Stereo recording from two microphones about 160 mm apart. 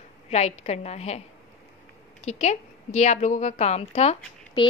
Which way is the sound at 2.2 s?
45° left (ahead or behind).